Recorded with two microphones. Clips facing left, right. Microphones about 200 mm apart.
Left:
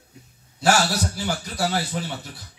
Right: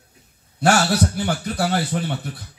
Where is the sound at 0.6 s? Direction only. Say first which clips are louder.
Right 3 dB; 60° right (ahead or behind).